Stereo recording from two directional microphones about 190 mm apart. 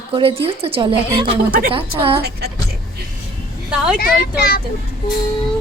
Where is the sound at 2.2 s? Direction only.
55° right (ahead or behind).